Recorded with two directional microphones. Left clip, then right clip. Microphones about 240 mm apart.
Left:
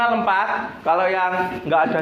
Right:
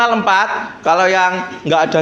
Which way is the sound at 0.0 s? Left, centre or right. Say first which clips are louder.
Right 6 dB; right.